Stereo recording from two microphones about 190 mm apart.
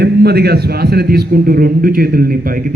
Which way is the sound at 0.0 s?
55° right (ahead or behind).